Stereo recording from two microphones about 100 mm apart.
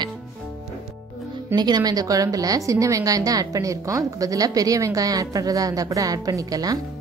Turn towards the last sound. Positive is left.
turn(degrees=-40)  # may be behind; listen again after turning